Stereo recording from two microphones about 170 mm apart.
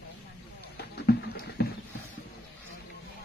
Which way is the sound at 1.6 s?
70° left (ahead or behind).